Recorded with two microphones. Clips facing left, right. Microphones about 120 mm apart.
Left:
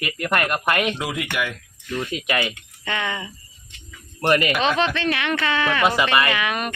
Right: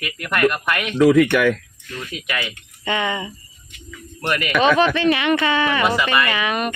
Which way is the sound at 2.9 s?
5° right (ahead or behind).